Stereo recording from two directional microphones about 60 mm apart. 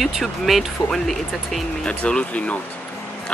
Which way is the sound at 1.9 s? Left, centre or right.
Centre.